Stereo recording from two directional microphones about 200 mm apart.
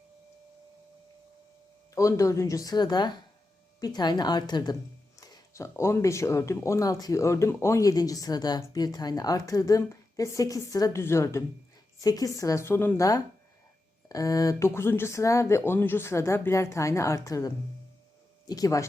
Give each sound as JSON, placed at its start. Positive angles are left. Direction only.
{"t": 2.0, "sound": "speech", "side_deg": 15}